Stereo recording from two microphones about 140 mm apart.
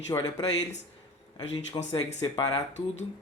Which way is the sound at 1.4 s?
35° left (ahead or behind).